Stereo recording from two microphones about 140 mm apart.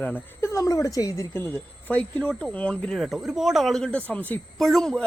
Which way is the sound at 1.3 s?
10° left (ahead or behind).